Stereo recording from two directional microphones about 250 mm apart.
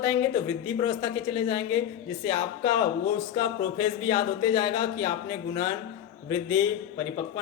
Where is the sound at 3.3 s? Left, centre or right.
Centre.